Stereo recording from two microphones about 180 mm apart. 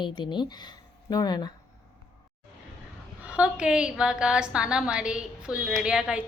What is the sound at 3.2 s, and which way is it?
A woman's voice, 5° right (ahead or behind).